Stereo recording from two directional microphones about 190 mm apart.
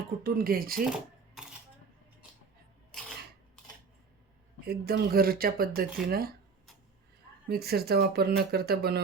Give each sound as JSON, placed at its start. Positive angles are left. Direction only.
{"t": 0.2, "sound": "speech", "side_deg": -50}
{"t": 1.4, "sound": "cutlery", "side_deg": 0}
{"t": 4.6, "sound": "speech", "side_deg": -60}
{"t": 7.4, "sound": "speech", "side_deg": -55}